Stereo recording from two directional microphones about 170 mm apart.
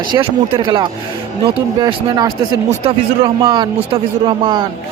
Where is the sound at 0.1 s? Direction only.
25° right (ahead or behind).